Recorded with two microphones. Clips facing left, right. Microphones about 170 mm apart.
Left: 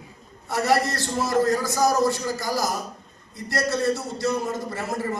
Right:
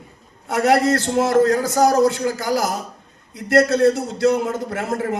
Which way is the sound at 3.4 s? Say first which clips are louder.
Right 10 dB; 80° right.